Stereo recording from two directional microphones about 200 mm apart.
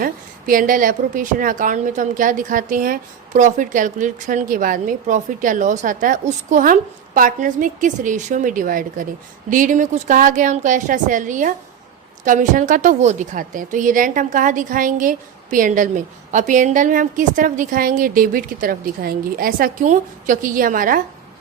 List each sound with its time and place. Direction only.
0.0 s a woman's voice: 45° right (ahead or behind)